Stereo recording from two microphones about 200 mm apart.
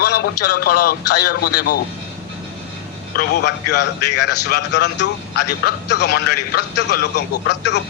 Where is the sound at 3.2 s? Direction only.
55° left (ahead or behind).